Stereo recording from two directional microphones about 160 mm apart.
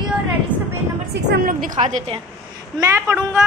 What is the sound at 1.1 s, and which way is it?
Speech, 75° right (ahead or behind).